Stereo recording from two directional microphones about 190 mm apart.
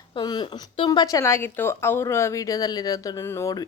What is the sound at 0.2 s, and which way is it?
A woman's voice, 20° left (ahead or behind).